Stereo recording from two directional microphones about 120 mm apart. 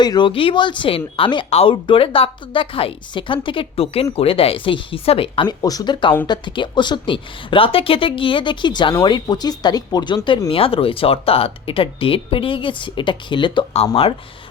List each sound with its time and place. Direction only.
0.0 s speech: 40° left (ahead or behind)
1.5 s speech: 60° left (ahead or behind)
1.7 s speech: 50° left (ahead or behind)
5.5 s speech: 35° left (ahead or behind)
10.5 s speech: 50° left (ahead or behind)